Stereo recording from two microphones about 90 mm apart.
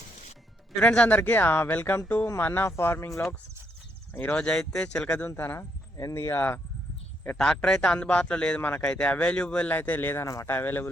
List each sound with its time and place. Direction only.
0.8 s speech: 10° left (ahead or behind)
4.4 s a man's voice: 10° left (ahead or behind)
5.2 s speech: 25° left (ahead or behind)
7.3 s a man's voice: 5° left (ahead or behind); by 10.8 s 20° left (ahead or behind)